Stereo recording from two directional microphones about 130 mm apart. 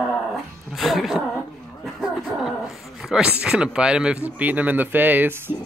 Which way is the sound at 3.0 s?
5° right (ahead or behind).